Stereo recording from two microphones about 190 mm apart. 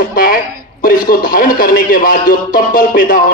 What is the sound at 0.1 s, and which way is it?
A man's voice, 50° left (ahead or behind).